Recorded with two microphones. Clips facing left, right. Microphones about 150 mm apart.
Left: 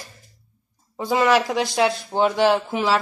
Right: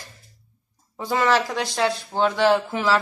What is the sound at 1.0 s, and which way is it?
Speech, 15° left (ahead or behind).